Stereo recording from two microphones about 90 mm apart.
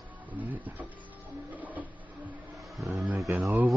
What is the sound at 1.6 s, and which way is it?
Printer, 20° right (ahead or behind).